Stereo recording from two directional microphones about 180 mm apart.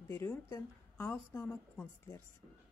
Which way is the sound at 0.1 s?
15° left (ahead or behind).